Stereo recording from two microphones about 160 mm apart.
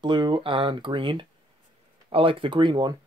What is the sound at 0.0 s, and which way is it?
Speech, 30° right (ahead or behind).